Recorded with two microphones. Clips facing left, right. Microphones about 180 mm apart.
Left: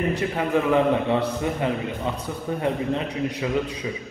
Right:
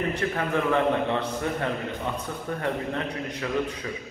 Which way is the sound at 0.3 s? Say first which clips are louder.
Left 4 dB; 15° left (ahead or behind).